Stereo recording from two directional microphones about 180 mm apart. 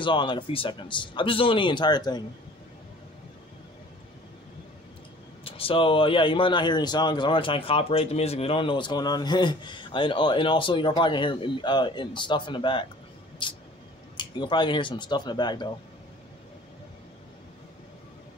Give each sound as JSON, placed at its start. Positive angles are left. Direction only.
{"t": 0.0, "sound": "speech", "side_deg": 25}
{"t": 5.4, "sound": "speech", "side_deg": 30}